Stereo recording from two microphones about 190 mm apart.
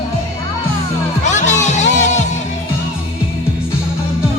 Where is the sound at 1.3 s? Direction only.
40° left (ahead or behind).